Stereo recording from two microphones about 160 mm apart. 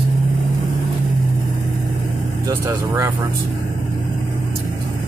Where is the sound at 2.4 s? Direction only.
20° right (ahead or behind).